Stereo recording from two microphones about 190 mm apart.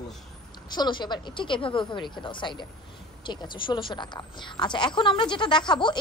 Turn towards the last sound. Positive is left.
turn(degrees=25)  # may be behind; listen again after turning